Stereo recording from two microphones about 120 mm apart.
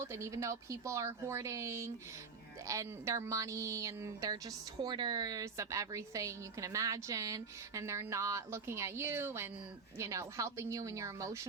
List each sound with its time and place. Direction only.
0.0 s a woman's voice: 25° right (ahead or behind)